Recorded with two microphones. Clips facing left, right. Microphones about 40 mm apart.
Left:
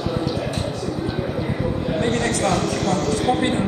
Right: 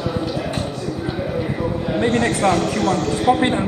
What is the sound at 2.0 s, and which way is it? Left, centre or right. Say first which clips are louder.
A man's voice: right 4 dB; centre.